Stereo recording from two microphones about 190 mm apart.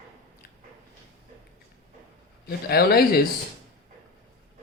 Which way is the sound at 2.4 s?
55° left (ahead or behind).